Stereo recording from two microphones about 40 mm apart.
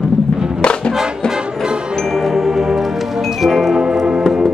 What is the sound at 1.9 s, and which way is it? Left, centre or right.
Music, centre.